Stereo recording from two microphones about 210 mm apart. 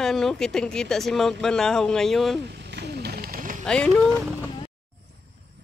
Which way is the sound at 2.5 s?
50° right (ahead or behind).